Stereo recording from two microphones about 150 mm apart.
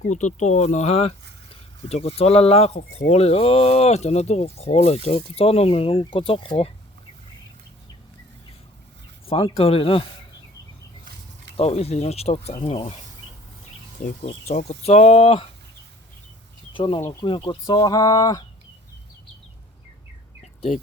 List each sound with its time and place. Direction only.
0.1 s speech: 50° left (ahead or behind); by 6.7 s 35° left (ahead or behind)
9.2 s speech: 40° left (ahead or behind)
11.5 s speech: 45° left (ahead or behind)
14.0 s speech: 50° left (ahead or behind)
16.7 s speech: 35° left (ahead or behind)
17.0 s speech: 20° left (ahead or behind)
17.2 s speech: 30° left (ahead or behind)
20.4 s a sound: 50° left (ahead or behind)